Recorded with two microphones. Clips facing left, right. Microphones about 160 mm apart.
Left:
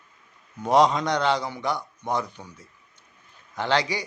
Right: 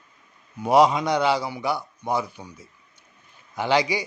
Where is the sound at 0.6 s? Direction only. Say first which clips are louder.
Right 2 dB; 5° right (ahead or behind).